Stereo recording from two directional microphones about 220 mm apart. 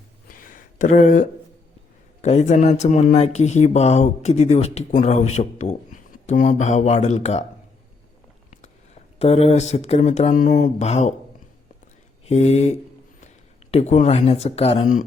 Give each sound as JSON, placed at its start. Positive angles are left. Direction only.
{"t": 0.3, "sound": "a sound", "side_deg": 40}
{"t": 2.2, "sound": "speech", "side_deg": 30}
{"t": 9.1, "sound": "speech", "side_deg": 25}
{"t": 12.2, "sound": "speech", "side_deg": 30}